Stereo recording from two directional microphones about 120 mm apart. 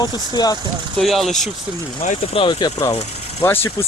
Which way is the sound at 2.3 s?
45° left (ahead or behind).